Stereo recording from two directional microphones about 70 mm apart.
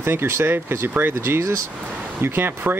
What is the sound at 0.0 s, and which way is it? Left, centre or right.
Speech, right.